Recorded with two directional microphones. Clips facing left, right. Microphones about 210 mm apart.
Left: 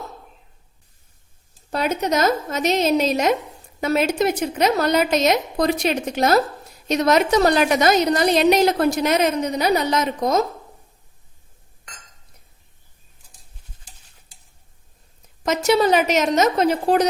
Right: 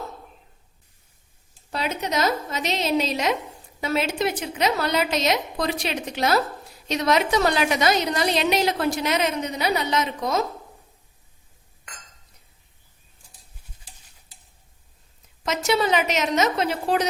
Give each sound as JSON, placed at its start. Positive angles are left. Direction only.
{"t": 1.7, "sound": "a woman's voice", "side_deg": 45}
{"t": 15.4, "sound": "a woman's voice", "side_deg": 40}